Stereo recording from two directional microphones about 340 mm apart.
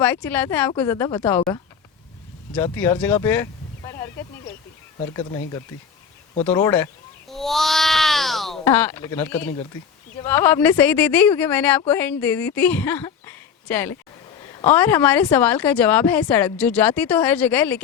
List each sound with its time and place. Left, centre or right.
0.0 s a woman's voice: centre
2.7 s speech: centre
6.4 s a sound: centre
10.2 s a woman's voice: centre